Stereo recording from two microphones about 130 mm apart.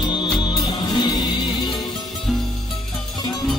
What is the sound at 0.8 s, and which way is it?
Music, 30° left (ahead or behind).